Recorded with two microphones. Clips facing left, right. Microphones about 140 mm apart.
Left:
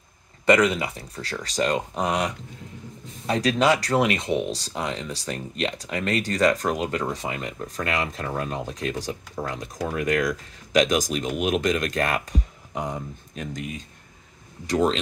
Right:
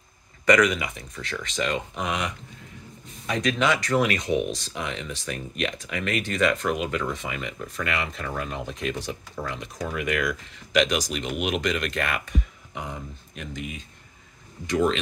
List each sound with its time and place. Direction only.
0.5 s speech: 30° left (ahead or behind)
14.7 s speech: 40° left (ahead or behind)